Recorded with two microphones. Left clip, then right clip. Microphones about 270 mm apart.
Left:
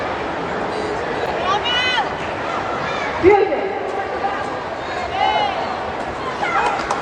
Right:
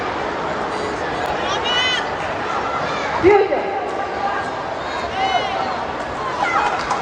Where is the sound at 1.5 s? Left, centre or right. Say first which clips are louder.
Left 1 dB; centre.